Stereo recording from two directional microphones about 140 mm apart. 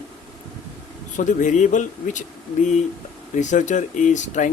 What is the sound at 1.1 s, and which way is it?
Speech, 65° left (ahead or behind).